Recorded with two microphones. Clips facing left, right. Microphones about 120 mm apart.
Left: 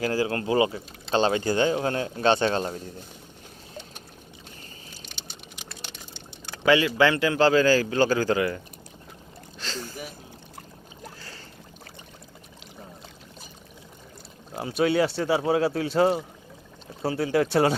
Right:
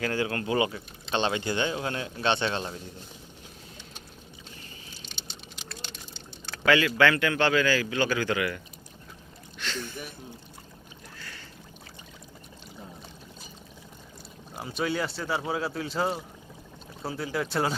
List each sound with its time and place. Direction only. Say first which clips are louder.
0.0 s speech: left 3 dB; 30° left (ahead or behind)
6.5 s speech: left 3 dB; 25° left (ahead or behind)
14.5 s boat: left 6 dB; centre (ahead or behind)
14.8 s speech: left 7 dB; 65° left (ahead or behind)
15.3 s speech: left 7 dB; 5° left (ahead or behind)
15.5 s speech: left 7 dB; 70° left (ahead or behind)
17.1 s speech: left 8 dB; 70° left (ahead or behind)